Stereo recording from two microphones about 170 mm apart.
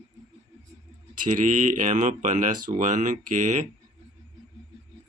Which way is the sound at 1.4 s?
50° right (ahead or behind).